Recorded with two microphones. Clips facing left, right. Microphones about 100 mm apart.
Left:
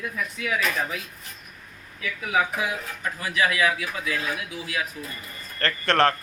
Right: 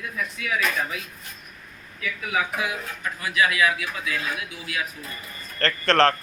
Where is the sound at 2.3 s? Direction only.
25° left (ahead or behind).